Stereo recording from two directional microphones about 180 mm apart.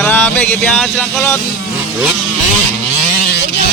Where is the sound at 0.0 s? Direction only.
10° left (ahead or behind).